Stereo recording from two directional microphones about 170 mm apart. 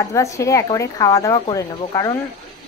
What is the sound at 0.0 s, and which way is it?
Speech, 20° left (ahead or behind).